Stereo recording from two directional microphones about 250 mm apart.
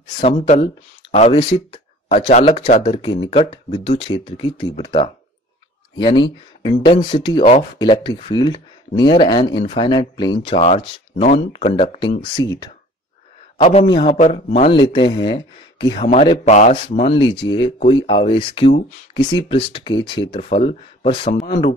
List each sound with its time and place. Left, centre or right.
1.1 s a man's voice: left